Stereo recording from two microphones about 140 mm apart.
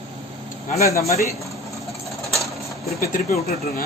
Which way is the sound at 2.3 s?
Centre (ahead or behind).